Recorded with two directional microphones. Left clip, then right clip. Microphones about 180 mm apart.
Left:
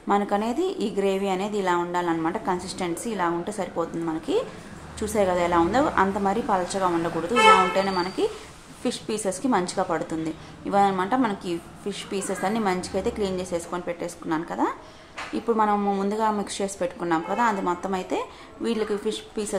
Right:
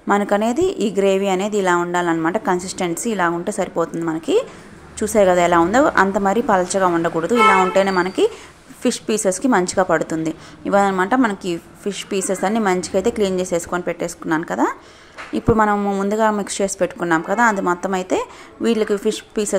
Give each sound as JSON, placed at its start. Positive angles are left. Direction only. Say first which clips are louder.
{"t": 0.1, "sound": "a woman's voice", "louder": "right 6 dB", "side_deg": -35}